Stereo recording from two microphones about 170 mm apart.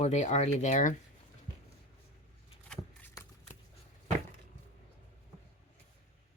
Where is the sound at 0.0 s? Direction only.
40° left (ahead or behind).